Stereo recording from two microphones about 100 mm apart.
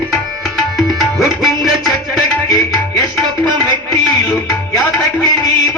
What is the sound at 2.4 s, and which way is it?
Tabla, 35° left (ahead or behind).